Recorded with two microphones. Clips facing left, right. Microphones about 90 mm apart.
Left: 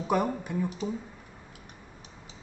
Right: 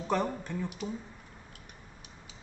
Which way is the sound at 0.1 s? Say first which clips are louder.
Left 3 dB; 10° left (ahead or behind).